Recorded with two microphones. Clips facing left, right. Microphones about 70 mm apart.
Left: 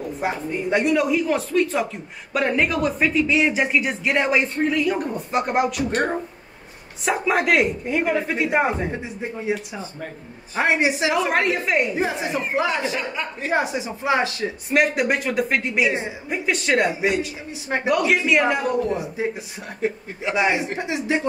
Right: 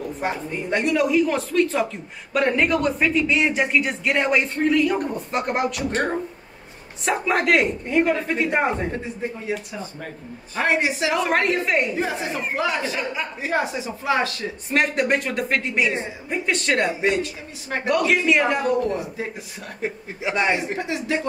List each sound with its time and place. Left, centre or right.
0.2 s speech: centre
7.1 s speech: centre
10.5 s speech: centre
11.2 s speech: centre
12.0 s speech: centre
13.1 s speech: centre
13.5 s speech: centre
14.7 s speech: centre
19.8 s speech: centre
20.3 s speech: centre
20.8 s speech: left